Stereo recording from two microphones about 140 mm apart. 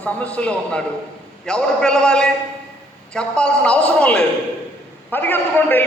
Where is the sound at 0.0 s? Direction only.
10° left (ahead or behind).